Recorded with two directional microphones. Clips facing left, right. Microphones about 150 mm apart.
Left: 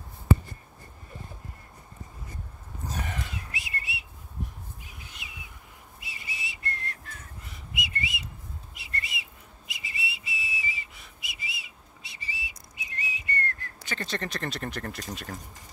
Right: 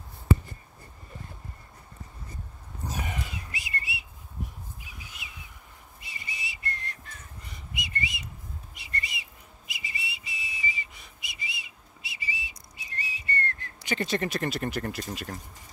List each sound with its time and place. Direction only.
2.9 s a sound: 5° right (ahead or behind)
5.2 s a sound: centre (ahead or behind)
5.9 s whistle: 5° left (ahead or behind)
7.4 s whistling: 5° left (ahead or behind)
8.7 s whistle: centre (ahead or behind); by 12.5 s 20° right (ahead or behind)
12.7 s whistle: 35° right (ahead or behind)
13.8 s speech: 15° right (ahead or behind)